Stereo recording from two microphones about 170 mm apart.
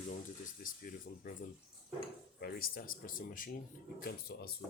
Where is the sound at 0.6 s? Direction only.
55° left (ahead or behind).